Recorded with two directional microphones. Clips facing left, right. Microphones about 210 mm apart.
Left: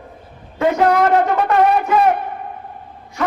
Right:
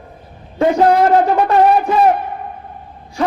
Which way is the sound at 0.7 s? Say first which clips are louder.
Right 3 dB; 30° right (ahead or behind).